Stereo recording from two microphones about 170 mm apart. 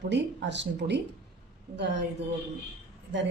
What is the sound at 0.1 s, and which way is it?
Speech, 90° right.